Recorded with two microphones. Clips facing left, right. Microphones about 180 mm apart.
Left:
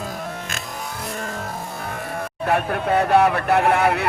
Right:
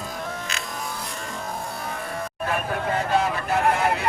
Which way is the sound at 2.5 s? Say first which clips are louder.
Left 6 dB; 65° left (ahead or behind).